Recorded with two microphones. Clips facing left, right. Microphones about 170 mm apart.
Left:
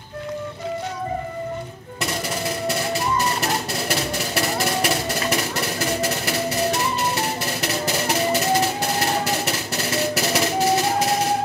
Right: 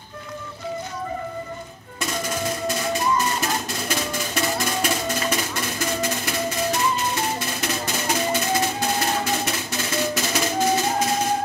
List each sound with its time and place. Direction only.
2.7 s music: 70° left (ahead or behind)